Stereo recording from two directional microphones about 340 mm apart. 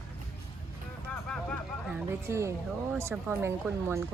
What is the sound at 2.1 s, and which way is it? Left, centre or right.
Speech, centre.